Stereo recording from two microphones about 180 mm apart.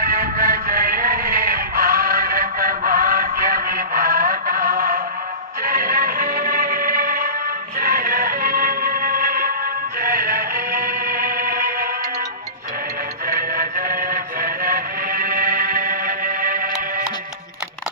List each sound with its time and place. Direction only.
0.1 s music: 55° right (ahead or behind)
13.2 s music: 50° right (ahead or behind)